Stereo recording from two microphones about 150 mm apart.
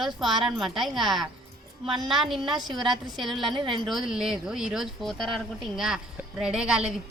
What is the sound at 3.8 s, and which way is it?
Speech, centre (ahead or behind).